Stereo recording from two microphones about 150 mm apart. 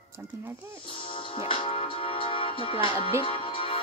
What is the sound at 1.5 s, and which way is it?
Speech, 35° left (ahead or behind).